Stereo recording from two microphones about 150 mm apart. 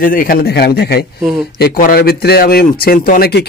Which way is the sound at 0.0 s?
65° left (ahead or behind).